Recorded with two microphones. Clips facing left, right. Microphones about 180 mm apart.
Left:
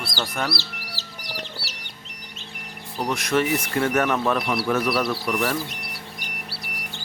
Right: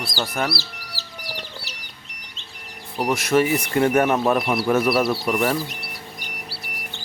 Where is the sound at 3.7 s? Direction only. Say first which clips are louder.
Right 4 dB; 30° right (ahead or behind).